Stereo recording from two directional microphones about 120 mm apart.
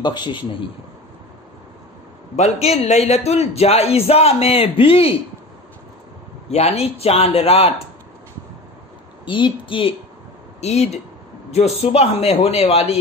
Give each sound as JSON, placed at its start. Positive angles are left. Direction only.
{"t": 0.0, "sound": "a man's voice", "side_deg": 40}
{"t": 2.3, "sound": "a man's voice", "side_deg": 65}
{"t": 6.5, "sound": "a man's voice", "side_deg": 60}
{"t": 9.2, "sound": "a woman's voice", "side_deg": 45}
{"t": 10.6, "sound": "a man's voice", "side_deg": 65}